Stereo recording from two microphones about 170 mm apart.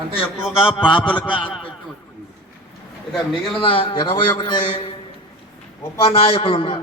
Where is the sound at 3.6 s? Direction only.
30° left (ahead or behind).